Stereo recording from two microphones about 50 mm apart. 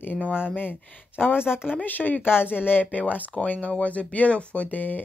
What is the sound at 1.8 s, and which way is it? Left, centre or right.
Speech, left.